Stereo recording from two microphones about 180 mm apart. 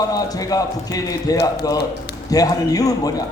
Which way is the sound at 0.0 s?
20° left (ahead or behind).